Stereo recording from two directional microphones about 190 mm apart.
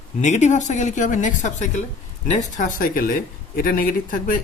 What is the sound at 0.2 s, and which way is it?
A woman's voice, 40° left (ahead or behind).